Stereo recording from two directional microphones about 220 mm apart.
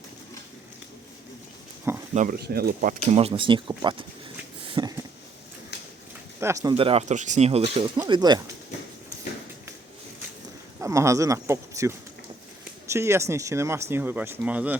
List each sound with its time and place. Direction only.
2.1 s speech: 40° right (ahead or behind); by 4.0 s 20° right (ahead or behind)
4.7 s a sound: 20° right (ahead or behind)
6.4 s speech: 15° right (ahead or behind)
10.8 s speech: 15° right (ahead or behind)